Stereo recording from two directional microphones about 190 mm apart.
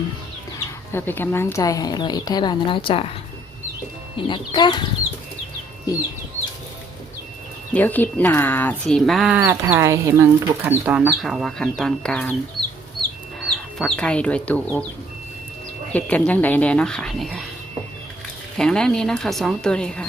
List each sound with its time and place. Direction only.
0.6 s speech: 10° left (ahead or behind); by 3.1 s 30° left (ahead or behind)
4.3 s speech: 25° left (ahead or behind)
7.7 s speech: 10° left (ahead or behind)
13.5 s speech: 5° left (ahead or behind)
15.9 s speech: 10° left (ahead or behind)
18.5 s speech: 5° left (ahead or behind)